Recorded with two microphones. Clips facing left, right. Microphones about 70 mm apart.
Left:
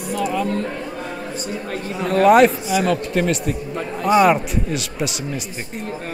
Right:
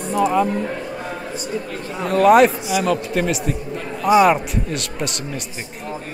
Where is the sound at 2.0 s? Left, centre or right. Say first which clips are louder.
Even; centre.